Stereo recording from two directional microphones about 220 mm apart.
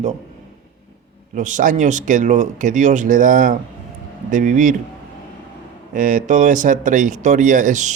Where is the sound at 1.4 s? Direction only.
35° right (ahead or behind).